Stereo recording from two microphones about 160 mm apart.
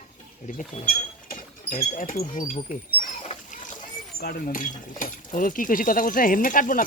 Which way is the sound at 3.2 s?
50° left (ahead or behind).